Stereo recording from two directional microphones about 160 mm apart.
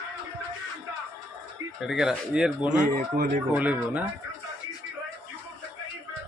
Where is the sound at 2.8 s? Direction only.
55° right (ahead or behind).